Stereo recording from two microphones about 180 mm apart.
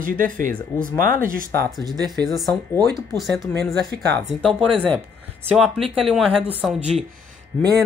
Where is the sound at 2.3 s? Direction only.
Centre (ahead or behind).